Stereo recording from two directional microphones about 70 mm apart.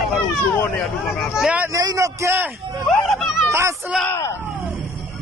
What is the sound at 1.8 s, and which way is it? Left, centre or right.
Speech, right.